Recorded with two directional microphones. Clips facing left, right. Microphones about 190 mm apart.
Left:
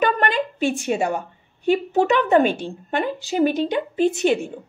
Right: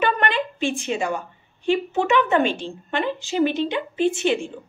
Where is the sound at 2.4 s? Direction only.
10° left (ahead or behind).